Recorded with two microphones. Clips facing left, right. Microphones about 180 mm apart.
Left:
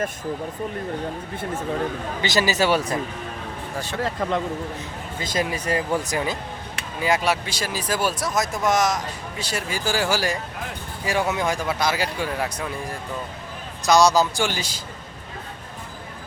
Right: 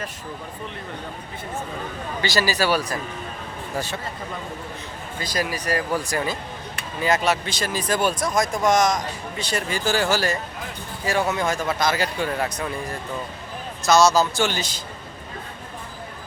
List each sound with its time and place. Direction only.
2.2 s speech: 20° left (ahead or behind)
4.2 s speech: 90° left
5.2 s speech: 25° left (ahead or behind); by 12.7 s 5° left (ahead or behind)
13.8 s speech: 15° left (ahead or behind)